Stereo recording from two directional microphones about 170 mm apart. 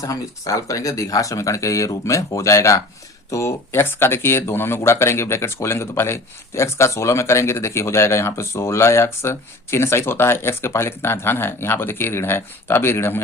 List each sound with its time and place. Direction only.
0.0 s speech: 20° left (ahead or behind)